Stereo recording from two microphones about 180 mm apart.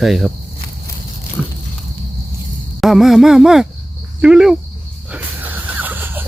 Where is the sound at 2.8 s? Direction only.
Centre (ahead or behind).